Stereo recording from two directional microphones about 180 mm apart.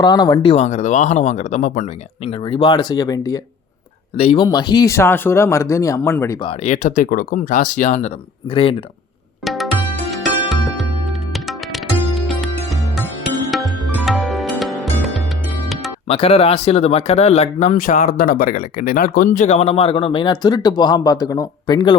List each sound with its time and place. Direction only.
0.0 s speech: 25° left (ahead or behind)
0.5 s speech: 40° left (ahead or behind)
2.2 s speech: 30° left (ahead or behind)
4.2 s speech: 30° left (ahead or behind); by 6.3 s 15° left (ahead or behind)
6.4 s speech: 30° left (ahead or behind)
6.7 s speech: 45° left (ahead or behind)
9.4 s music: centre (ahead or behind)
13.5 s music: centre (ahead or behind)
16.0 s speech: 35° left (ahead or behind)